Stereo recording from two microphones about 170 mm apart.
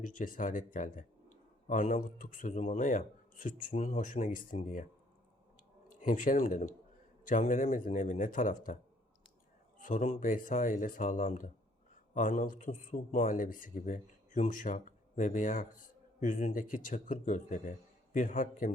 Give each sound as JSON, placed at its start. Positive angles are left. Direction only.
{"t": 0.0, "sound": "speech", "side_deg": 50}
{"t": 5.9, "sound": "speech", "side_deg": 50}